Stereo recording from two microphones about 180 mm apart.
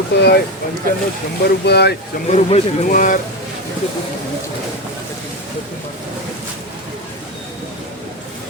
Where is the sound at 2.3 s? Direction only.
40° left (ahead or behind).